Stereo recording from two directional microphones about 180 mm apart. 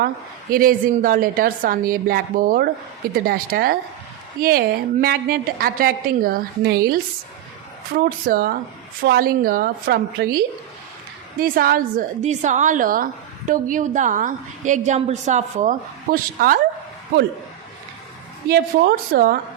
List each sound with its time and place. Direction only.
0.5 s a woman's voice: 50° right (ahead or behind)
18.4 s a woman's voice: 65° right (ahead or behind)